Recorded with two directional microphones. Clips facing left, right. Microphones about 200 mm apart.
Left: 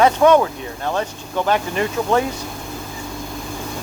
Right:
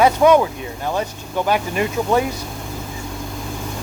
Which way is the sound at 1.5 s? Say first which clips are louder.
Even; 10° right (ahead or behind).